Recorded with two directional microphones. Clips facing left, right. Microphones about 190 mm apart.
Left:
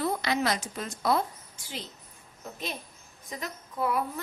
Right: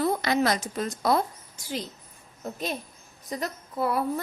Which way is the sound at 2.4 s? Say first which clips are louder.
Right 6 dB; 40° right (ahead or behind).